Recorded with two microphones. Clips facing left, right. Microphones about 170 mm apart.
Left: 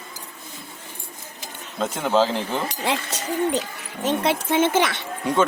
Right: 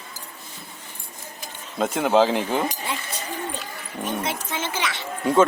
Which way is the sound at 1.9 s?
10° right (ahead or behind).